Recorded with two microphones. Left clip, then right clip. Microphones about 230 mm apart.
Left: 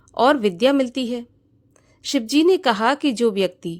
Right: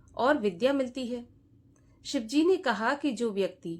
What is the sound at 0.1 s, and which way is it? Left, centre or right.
A woman's voice, left.